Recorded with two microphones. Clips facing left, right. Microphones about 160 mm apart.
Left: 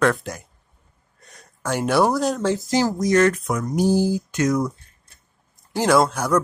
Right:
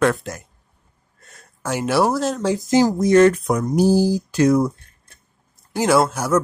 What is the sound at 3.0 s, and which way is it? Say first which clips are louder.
Speech: right 4 dB; 25° right (ahead or behind).